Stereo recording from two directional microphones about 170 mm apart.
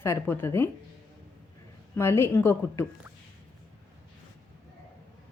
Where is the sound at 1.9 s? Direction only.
15° left (ahead or behind).